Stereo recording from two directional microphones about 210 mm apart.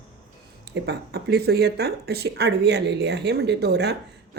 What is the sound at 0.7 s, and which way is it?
Speech, 55° right (ahead or behind).